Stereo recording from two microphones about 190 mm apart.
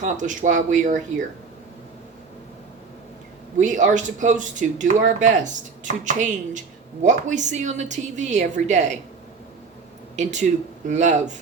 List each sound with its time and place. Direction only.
0.0 s speech: 40° right (ahead or behind)
3.6 s speech: 40° right (ahead or behind)
10.2 s speech: 40° right (ahead or behind)